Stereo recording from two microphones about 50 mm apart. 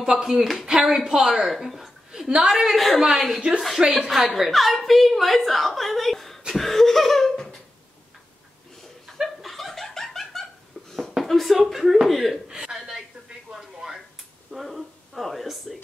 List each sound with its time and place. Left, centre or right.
0.0 s a woman's voice: centre
1.5 s a sound: centre
2.2 s a woman's voice: centre
2.7 s a woman's voice: centre
6.5 s laughter: centre
9.2 s laughter: centre
11.2 s a woman's voice: centre
12.4 s a sound: centre